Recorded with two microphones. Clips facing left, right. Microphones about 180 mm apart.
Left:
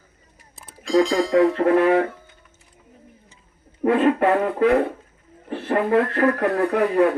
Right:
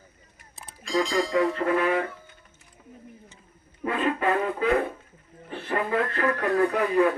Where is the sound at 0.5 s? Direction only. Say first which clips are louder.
Left 8 dB; centre (ahead or behind).